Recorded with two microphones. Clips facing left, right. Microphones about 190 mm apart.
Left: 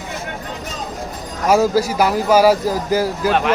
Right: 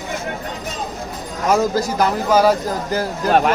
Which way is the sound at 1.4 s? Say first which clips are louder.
Left 3 dB; 10° left (ahead or behind).